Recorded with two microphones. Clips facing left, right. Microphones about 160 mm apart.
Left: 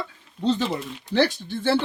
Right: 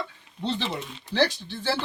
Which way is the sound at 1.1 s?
50° left (ahead or behind).